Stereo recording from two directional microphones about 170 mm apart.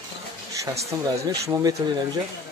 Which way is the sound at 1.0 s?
20° right (ahead or behind).